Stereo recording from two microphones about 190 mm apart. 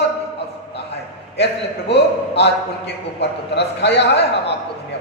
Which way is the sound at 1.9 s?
60° left (ahead or behind).